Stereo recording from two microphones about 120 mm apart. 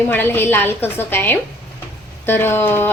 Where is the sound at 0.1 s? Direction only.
15° left (ahead or behind).